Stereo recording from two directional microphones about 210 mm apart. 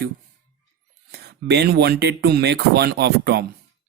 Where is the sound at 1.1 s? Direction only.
50° right (ahead or behind).